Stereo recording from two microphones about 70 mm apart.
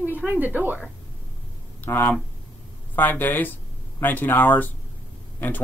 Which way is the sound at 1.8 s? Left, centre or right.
Left.